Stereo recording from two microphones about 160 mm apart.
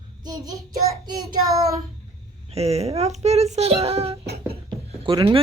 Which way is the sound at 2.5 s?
40° right (ahead or behind).